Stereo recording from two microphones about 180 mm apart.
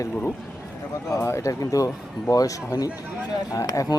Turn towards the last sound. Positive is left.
turn(degrees=20)  # may be behind; listen again after turning